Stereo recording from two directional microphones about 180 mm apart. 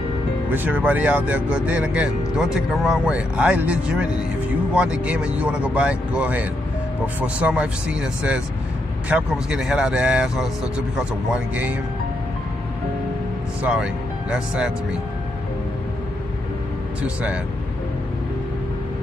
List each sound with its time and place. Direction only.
0.5 s speech: 10° right (ahead or behind)
13.6 s speech: 10° right (ahead or behind)